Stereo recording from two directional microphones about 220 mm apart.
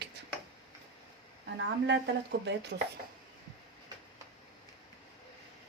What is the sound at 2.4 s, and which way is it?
Speech, 50° right (ahead or behind).